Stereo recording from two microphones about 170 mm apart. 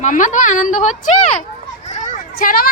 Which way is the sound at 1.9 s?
45° left (ahead or behind).